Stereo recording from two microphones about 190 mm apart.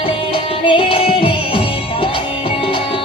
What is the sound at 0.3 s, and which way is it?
Music, 30° left (ahead or behind).